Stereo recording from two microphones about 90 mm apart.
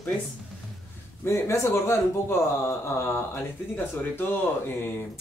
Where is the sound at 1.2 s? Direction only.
30° left (ahead or behind).